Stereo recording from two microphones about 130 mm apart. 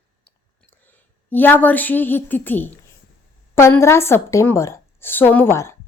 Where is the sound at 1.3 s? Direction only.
15° left (ahead or behind).